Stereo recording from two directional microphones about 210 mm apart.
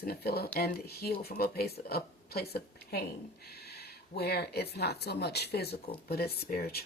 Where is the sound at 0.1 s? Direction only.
50° left (ahead or behind).